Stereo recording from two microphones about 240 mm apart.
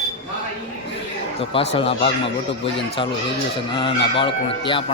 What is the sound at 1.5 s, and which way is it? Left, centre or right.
Speech, left.